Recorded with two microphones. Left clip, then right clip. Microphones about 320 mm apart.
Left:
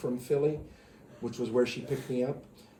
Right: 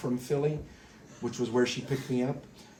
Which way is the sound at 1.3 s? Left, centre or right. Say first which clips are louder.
Even; centre.